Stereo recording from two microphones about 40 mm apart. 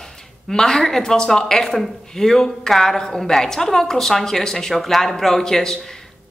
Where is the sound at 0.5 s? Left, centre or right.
Centre.